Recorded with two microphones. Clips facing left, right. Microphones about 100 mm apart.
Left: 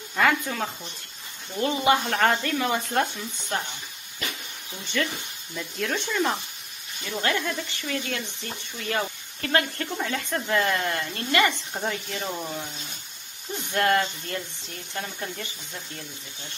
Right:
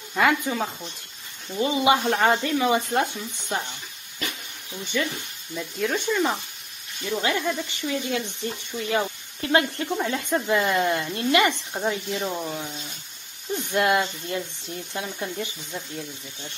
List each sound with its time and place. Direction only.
0.1 s speech: 5° right (ahead or behind)
4.9 s speech: 5° right (ahead or behind)
13.7 s speech: 10° right (ahead or behind)